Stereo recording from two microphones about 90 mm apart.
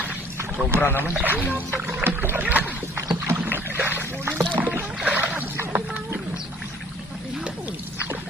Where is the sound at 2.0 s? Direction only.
25° right (ahead or behind).